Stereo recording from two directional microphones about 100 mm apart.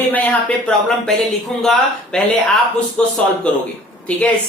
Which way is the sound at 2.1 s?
5° left (ahead or behind).